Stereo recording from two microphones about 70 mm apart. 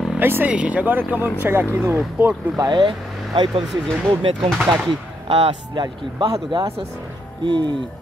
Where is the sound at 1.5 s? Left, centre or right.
Right.